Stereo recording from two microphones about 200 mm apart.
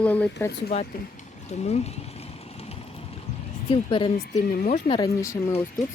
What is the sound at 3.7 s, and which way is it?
Speech, 25° left (ahead or behind).